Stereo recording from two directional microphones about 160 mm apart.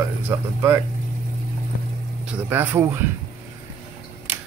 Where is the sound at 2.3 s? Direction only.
10° right (ahead or behind).